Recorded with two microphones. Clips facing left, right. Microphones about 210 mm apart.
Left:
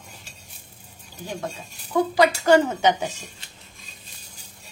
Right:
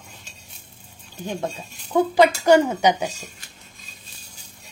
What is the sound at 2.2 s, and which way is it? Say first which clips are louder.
Speech: right 2 dB; 15° right (ahead or behind).